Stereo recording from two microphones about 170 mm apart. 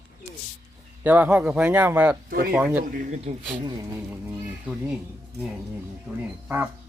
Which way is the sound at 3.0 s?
40° right (ahead or behind).